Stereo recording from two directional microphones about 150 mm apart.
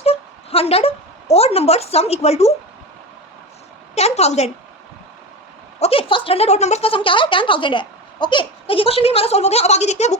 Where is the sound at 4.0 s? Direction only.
45° left (ahead or behind).